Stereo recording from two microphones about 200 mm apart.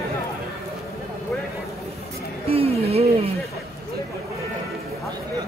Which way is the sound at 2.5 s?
30° right (ahead or behind).